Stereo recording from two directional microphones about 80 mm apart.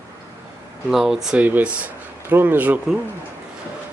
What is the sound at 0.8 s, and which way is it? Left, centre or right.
Speech, centre.